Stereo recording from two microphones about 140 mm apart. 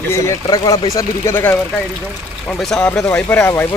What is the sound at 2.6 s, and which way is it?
Speech, 5° left (ahead or behind).